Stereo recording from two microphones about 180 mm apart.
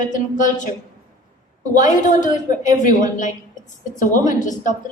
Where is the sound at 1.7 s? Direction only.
45° left (ahead or behind).